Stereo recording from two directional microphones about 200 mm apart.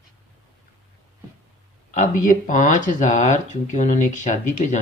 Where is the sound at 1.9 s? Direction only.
40° left (ahead or behind).